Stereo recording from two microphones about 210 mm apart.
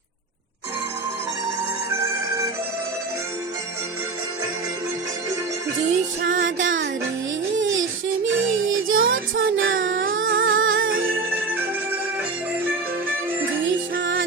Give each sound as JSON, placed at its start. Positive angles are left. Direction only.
{"t": 6.2, "sound": "music", "side_deg": -65}
{"t": 7.6, "sound": "a sound", "side_deg": -65}
{"t": 8.3, "sound": "child singing", "side_deg": -70}
{"t": 10.3, "sound": "music", "side_deg": -70}
{"t": 13.7, "sound": "music", "side_deg": -65}